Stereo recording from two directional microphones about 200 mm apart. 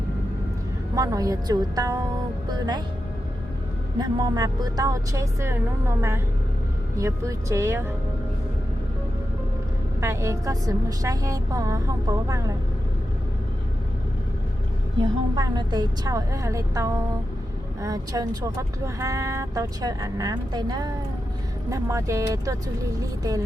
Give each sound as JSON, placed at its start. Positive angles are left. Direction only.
{"t": 0.9, "sound": "speech", "side_deg": -15}
{"t": 3.9, "sound": "speech", "side_deg": -20}
{"t": 10.0, "sound": "speech", "side_deg": -15}
{"t": 15.4, "sound": "speech", "side_deg": -20}